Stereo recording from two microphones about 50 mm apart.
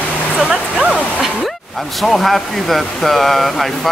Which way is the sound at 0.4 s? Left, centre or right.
Centre.